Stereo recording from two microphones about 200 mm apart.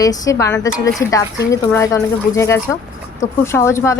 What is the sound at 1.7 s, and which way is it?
Speech, 15° left (ahead or behind).